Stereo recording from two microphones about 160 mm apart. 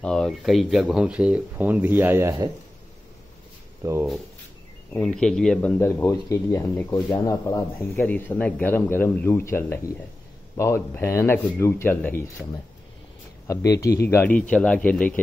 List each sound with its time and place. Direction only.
0.0 s speech: 5° left (ahead or behind); by 2.5 s 15° right (ahead or behind)
3.8 s speech: 15° right (ahead or behind)
5.0 s speech: 5° left (ahead or behind)
5.8 s speech: 15° left (ahead or behind)
13.5 s speech: 20° left (ahead or behind)